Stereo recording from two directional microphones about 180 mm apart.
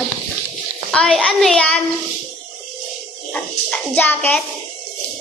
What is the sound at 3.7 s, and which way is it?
Speech, 10° left (ahead or behind).